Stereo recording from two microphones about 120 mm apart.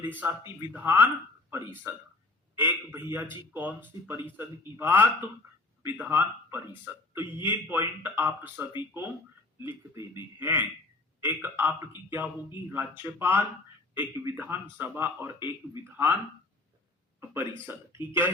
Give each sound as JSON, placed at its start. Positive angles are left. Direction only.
{"t": 0.2, "sound": "speech", "side_deg": -15}
{"t": 17.2, "sound": "speech", "side_deg": -15}